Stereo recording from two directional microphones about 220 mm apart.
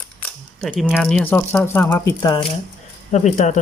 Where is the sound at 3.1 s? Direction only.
30° left (ahead or behind).